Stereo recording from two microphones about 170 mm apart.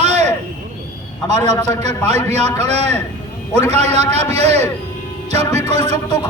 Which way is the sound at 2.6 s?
40° right (ahead or behind).